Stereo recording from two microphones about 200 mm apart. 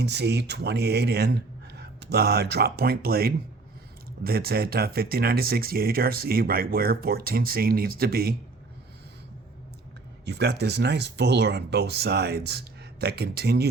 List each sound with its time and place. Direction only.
0.0 s speech: 55° right (ahead or behind)
10.2 s speech: 60° right (ahead or behind)